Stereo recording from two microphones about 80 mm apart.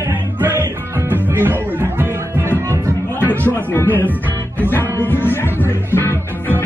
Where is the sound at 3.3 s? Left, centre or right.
Left.